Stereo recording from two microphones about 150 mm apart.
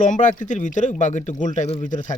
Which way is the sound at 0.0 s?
55° left (ahead or behind).